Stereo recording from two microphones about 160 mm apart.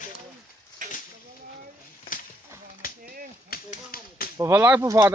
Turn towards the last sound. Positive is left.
turn(degrees=-15)  # may be behind; listen again after turning